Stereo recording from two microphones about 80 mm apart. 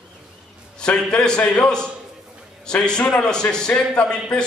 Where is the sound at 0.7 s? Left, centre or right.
Centre.